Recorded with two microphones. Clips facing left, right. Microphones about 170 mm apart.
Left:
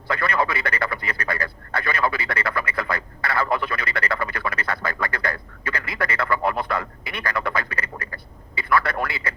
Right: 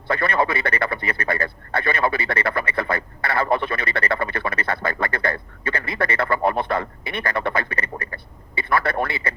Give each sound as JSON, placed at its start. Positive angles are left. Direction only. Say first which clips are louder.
{"t": 0.1, "sound": "speech", "louder": "right 2 dB", "side_deg": -25}